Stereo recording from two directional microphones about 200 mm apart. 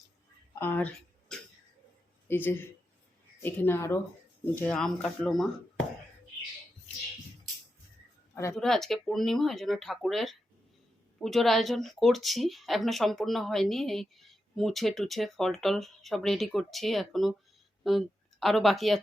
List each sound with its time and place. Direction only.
0.6 s speech: 10° left (ahead or behind)
8.5 s speech: centre (ahead or behind)